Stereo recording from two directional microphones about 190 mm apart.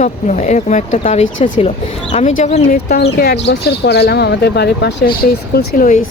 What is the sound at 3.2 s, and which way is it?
Speech, 60° left (ahead or behind).